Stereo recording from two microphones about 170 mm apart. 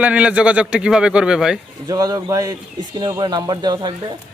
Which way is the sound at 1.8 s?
25° right (ahead or behind).